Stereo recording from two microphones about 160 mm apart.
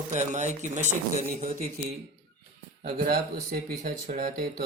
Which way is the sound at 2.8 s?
75° right (ahead or behind).